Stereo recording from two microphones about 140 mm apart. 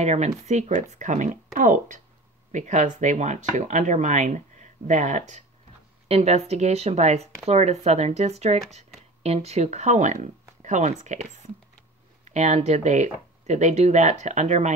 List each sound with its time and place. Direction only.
0.0 s speech: 55° right (ahead or behind)
6.0 s speech: 50° right (ahead or behind)
12.3 s speech: 55° right (ahead or behind)